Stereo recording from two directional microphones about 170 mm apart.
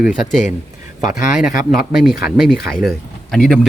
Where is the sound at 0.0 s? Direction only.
Centre (ahead or behind).